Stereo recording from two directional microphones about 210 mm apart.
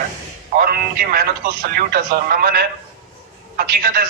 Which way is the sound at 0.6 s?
45° right (ahead or behind).